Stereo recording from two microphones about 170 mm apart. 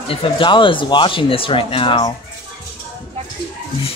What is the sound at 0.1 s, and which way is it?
Speech, 30° left (ahead or behind).